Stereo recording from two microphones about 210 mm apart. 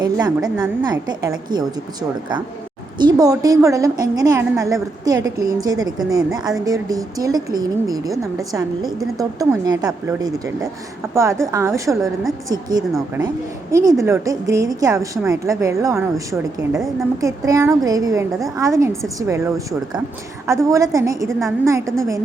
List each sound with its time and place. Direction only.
0.0 s a woman's voice: 20° right (ahead or behind)
16.3 s a woman's voice: centre (ahead or behind)
17.2 s a woman's voice: 15° right (ahead or behind)